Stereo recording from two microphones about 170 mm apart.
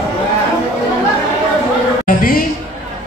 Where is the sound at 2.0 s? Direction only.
55° left (ahead or behind).